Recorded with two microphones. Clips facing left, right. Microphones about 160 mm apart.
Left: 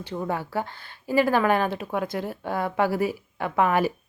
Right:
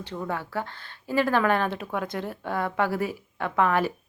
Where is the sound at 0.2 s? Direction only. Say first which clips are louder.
Left 3 dB; 10° left (ahead or behind).